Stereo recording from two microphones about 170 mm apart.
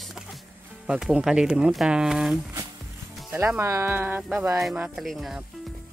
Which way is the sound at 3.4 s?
15° right (ahead or behind).